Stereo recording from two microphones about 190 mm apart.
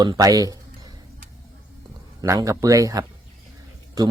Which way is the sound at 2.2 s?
15° right (ahead or behind).